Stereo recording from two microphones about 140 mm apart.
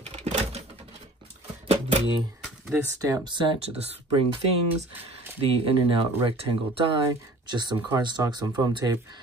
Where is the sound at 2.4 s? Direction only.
10° right (ahead or behind).